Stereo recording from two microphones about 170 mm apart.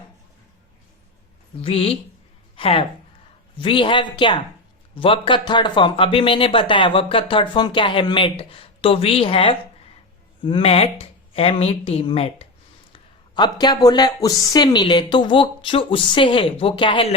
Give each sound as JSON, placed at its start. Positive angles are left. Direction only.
{"t": 1.6, "sound": "a woman's voice", "side_deg": 35}